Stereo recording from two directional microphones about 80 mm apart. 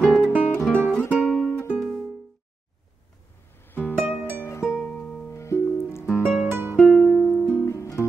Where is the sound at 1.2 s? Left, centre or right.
Centre.